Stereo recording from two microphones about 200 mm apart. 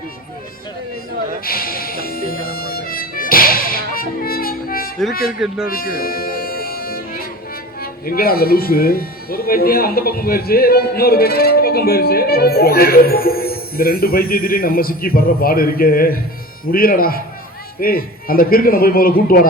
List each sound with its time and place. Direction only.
1.5 s music: 45° left (ahead or behind)
7.8 s speech: 50° left (ahead or behind)